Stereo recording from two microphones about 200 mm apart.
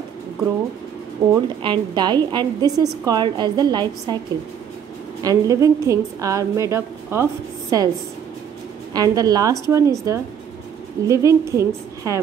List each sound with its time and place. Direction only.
1.3 s a woman's voice: 20° right (ahead or behind)
5.2 s a woman's voice: 15° right (ahead or behind)
8.9 s a woman's voice: 20° right (ahead or behind)